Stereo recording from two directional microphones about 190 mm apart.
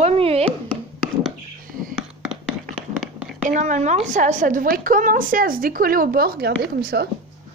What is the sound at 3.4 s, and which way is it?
A woman's voice, 40° right (ahead or behind).